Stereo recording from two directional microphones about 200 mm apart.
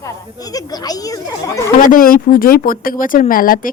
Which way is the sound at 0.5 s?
20° left (ahead or behind).